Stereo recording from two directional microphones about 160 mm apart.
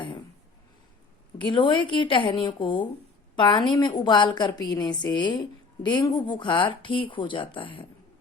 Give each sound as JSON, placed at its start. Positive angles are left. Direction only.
{"t": 1.4, "sound": "a woman's voice", "side_deg": 30}